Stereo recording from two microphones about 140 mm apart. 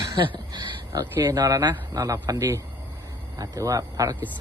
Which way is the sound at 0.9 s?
20° right (ahead or behind).